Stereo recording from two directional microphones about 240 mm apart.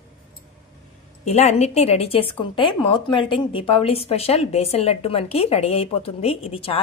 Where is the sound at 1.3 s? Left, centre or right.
Left.